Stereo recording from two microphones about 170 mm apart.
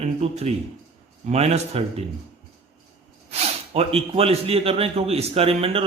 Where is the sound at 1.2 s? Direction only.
40° right (ahead or behind).